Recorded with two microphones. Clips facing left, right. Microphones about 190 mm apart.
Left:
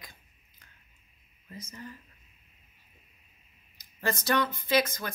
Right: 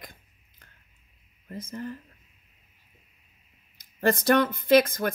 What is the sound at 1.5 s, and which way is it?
Speech, 55° right (ahead or behind).